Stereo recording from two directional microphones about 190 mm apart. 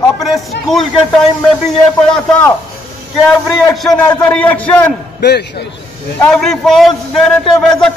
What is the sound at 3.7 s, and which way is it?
A man's voice, centre (ahead or behind).